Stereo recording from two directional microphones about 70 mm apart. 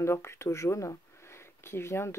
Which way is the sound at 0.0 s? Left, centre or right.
Left.